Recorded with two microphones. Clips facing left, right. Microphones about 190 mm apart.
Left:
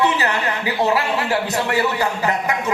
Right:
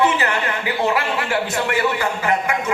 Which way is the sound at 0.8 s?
35° left (ahead or behind).